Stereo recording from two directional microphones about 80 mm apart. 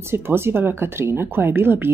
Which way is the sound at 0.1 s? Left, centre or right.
Right.